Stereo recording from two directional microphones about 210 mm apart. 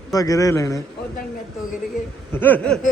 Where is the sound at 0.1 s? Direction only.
15° left (ahead or behind).